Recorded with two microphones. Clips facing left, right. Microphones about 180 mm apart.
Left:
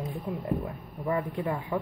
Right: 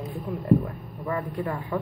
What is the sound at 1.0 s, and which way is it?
Speech, 15° left (ahead or behind).